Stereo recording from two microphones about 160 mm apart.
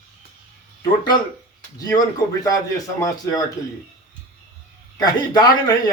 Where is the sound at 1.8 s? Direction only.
25° left (ahead or behind).